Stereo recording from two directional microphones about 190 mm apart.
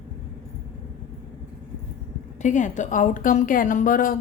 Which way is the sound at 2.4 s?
40° left (ahead or behind).